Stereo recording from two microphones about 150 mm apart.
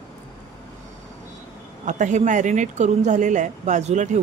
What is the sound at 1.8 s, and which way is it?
A woman's voice, 55° right (ahead or behind).